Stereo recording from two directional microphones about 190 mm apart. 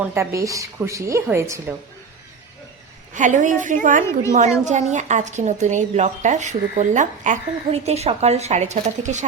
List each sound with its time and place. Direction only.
0.0 s a woman's voice: 10° right (ahead or behind)
3.2 s a woman's voice: 40° right (ahead or behind)